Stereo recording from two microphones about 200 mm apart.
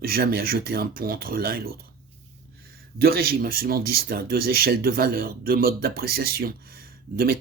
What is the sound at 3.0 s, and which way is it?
Speech, 50° right (ahead or behind).